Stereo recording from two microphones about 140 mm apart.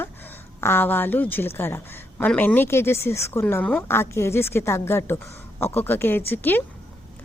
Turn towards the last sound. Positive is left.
turn(degrees=15)  # may be behind; listen again after turning